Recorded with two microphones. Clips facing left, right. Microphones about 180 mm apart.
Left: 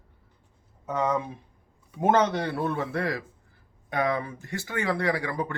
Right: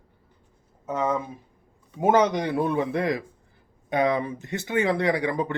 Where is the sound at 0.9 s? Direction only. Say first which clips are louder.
Right 1 dB; 5° right (ahead or behind).